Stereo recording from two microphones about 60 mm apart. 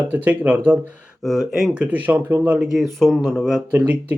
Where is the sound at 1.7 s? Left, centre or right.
Right.